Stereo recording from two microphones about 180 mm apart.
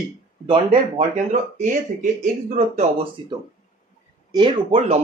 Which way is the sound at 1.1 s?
45° right (ahead or behind).